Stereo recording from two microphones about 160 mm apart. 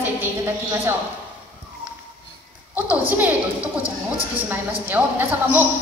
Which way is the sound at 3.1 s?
10° right (ahead or behind).